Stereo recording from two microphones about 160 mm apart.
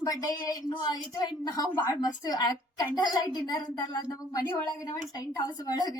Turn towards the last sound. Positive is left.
turn(degrees=25)  # may be behind; listen again after turning